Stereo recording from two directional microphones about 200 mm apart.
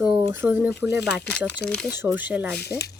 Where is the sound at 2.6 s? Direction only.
55° left (ahead or behind).